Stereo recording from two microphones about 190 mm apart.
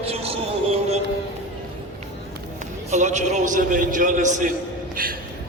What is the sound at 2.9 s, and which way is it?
A man's voice, 40° right (ahead or behind).